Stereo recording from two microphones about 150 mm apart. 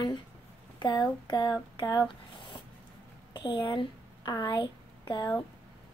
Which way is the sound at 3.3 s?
30° left (ahead or behind).